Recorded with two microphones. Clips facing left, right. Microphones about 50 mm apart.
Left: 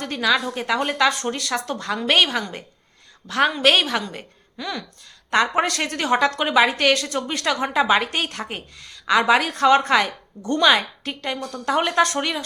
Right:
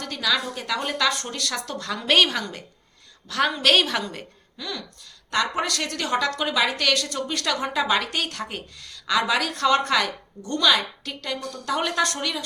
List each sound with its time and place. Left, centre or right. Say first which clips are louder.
0.0 s a woman's voice: left 4 dB; left; by 2.4 s centre
3.2 s a woman's voice: left 4 dB; left
3.5 s a woman's voice: left 2 dB; centre
4.5 s a woman's voice: left 4 dB; left